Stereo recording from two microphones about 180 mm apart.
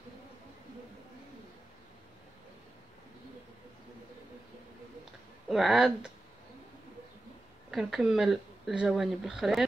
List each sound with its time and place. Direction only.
5.5 s speech: centre (ahead or behind)
7.7 s speech: centre (ahead or behind)